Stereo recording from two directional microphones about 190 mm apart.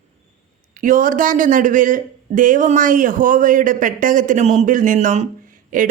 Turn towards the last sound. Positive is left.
turn(degrees=-45)  # may be behind; listen again after turning